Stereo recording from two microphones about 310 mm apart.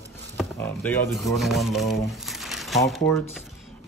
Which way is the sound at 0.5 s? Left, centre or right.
Centre.